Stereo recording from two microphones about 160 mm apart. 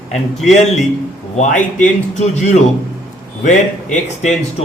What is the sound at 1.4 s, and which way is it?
A man's voice, 55° left (ahead or behind).